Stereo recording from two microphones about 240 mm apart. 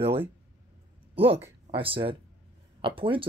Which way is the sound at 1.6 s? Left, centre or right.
Right.